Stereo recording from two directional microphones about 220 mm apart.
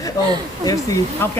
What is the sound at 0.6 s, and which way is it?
Speech, 15° left (ahead or behind).